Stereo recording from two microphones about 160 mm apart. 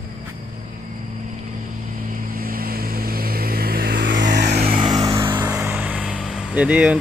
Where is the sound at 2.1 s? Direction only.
65° right (ahead or behind); by 4.8 s 80° right.